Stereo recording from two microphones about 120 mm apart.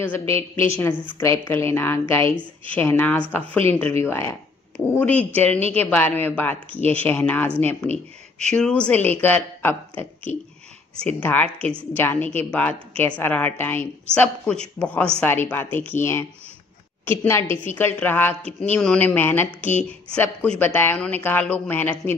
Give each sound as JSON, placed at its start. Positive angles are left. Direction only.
{"t": 0.0, "sound": "a woman's voice", "side_deg": 15}